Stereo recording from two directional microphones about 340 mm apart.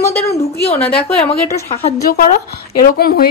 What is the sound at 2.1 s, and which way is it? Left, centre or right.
Speech, left.